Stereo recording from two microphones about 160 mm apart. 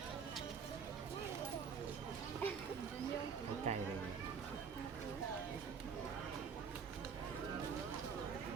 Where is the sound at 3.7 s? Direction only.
40° right (ahead or behind).